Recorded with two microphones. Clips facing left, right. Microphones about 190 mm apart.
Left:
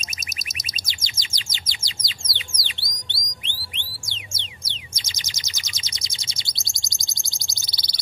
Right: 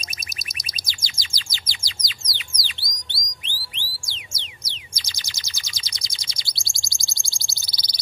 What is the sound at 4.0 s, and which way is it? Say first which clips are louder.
Music: left 2 dB; 25° left (ahead or behind).